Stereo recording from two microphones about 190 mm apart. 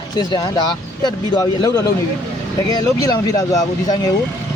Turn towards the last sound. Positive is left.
turn(degrees=20)  # may be behind; listen again after turning